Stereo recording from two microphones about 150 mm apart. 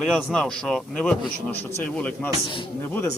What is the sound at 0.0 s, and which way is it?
A man's voice, 5° left (ahead or behind).